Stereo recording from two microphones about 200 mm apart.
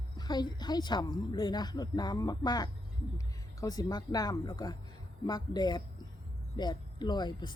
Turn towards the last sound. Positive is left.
turn(degrees=20)  # may be behind; listen again after turning